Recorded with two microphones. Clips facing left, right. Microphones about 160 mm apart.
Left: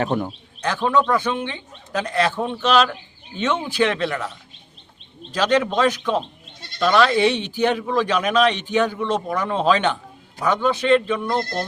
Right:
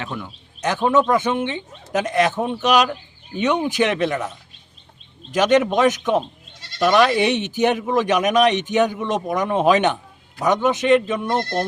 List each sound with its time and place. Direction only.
0.0 s speech: 45° left (ahead or behind)
0.6 s speech: 20° right (ahead or behind)
5.3 s speech: 20° right (ahead or behind)